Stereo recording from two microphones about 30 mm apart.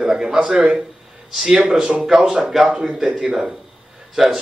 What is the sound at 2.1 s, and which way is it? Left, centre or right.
Speech, right.